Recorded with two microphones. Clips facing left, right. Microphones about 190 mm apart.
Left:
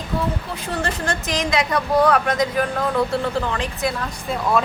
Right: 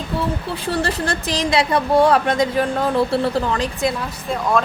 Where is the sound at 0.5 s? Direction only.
30° right (ahead or behind).